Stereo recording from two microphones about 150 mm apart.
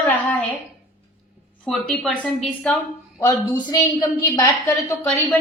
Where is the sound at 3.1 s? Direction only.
20° left (ahead or behind).